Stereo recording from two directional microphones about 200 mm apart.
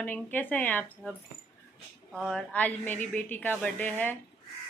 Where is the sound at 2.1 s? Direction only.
Centre (ahead or behind).